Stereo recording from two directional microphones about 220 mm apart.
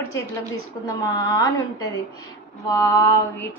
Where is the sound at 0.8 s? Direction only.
15° left (ahead or behind).